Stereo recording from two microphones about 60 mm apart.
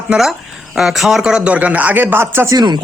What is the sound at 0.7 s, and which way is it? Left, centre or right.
Speech, centre.